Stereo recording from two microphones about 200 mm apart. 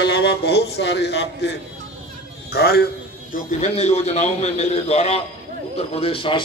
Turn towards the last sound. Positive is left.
turn(degrees=25)  # may be behind; listen again after turning